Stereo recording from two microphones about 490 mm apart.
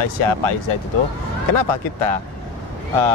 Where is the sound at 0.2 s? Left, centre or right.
Left.